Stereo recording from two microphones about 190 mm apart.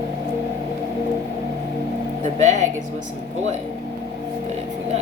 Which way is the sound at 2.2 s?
40° right (ahead or behind).